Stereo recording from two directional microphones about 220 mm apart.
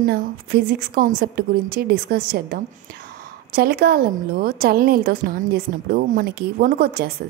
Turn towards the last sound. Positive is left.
turn(degrees=-45)  # may be behind; listen again after turning